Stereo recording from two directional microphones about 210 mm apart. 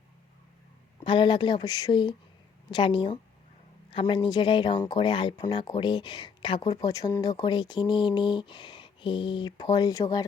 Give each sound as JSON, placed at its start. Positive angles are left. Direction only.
{"t": 1.0, "sound": "speech", "side_deg": 20}